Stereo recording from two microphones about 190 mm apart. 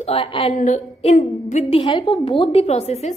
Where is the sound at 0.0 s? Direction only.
30° left (ahead or behind).